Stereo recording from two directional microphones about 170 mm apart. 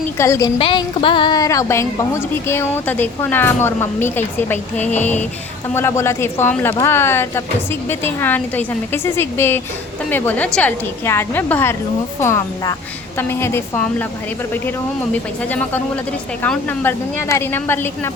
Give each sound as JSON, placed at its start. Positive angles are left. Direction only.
{"t": 0.2, "sound": "a woman's voice", "side_deg": 20}
{"t": 0.6, "sound": "a woman's voice", "side_deg": 30}
{"t": 15.4, "sound": "a woman's voice", "side_deg": 10}